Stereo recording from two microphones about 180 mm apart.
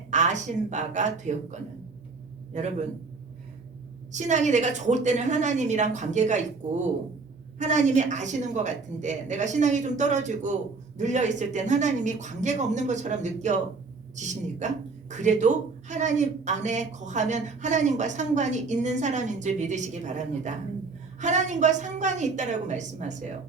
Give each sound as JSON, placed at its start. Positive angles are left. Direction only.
{"t": 0.1, "sound": "speech", "side_deg": -40}
{"t": 4.1, "sound": "speech", "side_deg": -40}
{"t": 7.6, "sound": "speech", "side_deg": -40}